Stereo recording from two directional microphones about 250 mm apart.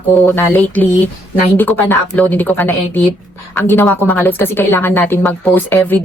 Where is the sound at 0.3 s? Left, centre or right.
Centre.